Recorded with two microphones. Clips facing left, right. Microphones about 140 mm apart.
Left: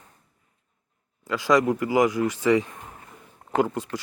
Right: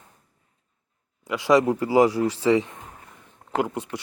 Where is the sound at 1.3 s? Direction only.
25° right (ahead or behind).